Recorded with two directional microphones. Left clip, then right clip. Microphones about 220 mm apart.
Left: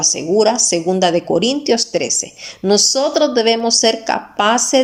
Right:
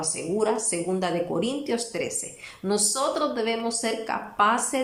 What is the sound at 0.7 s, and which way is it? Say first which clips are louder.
A woman's voice: left 12 dB; 35° left (ahead or behind).